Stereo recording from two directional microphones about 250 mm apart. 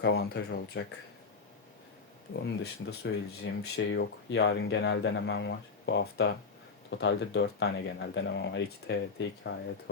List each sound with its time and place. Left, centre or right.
0.0 s speech: left
2.8 s speech: left